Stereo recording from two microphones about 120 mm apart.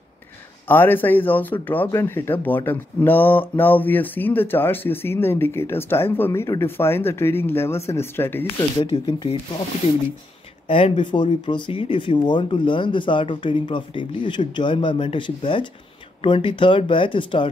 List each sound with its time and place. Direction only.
0.7 s speech: 15° left (ahead or behind)
8.7 s speech: 45° left (ahead or behind)
10.7 s speech: 45° left (ahead or behind)